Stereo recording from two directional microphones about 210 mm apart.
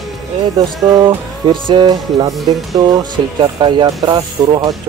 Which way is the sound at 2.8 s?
20° right (ahead or behind).